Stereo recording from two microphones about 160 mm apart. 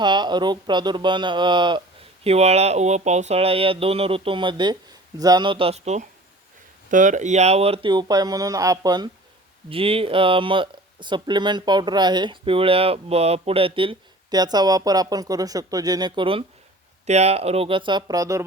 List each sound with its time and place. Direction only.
0.0 s speech: 30° right (ahead or behind)
2.2 s speech: 40° right (ahead or behind); by 9.0 s 25° right (ahead or behind)
9.6 s speech: 35° right (ahead or behind); by 18.4 s 20° right (ahead or behind)